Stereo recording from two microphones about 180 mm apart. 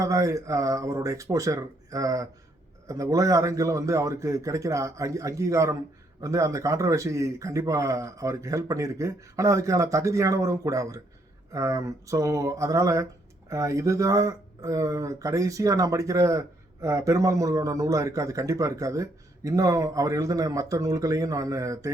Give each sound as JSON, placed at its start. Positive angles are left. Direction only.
{"t": 0.0, "sound": "speech", "side_deg": -15}